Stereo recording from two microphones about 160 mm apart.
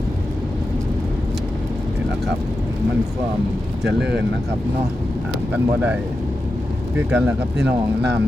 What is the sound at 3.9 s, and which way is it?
Speech, 90° right.